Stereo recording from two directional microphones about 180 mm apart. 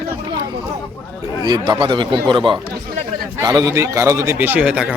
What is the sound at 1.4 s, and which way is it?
A man's voice, 25° right (ahead or behind).